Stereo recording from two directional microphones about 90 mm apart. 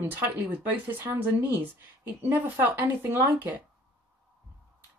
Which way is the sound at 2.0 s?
20° right (ahead or behind).